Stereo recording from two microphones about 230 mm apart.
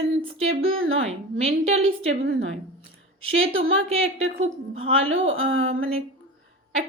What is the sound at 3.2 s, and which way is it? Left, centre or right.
A woman's voice, right.